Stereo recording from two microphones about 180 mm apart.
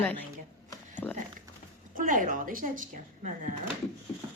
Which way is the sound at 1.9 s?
50° right (ahead or behind).